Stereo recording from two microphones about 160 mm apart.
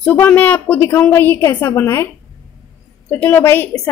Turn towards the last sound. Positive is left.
turn(degrees=10)  # may be behind; listen again after turning